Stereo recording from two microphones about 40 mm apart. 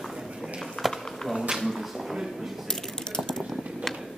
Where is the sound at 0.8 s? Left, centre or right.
Centre.